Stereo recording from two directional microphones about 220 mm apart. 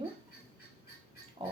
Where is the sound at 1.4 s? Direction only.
25° right (ahead or behind).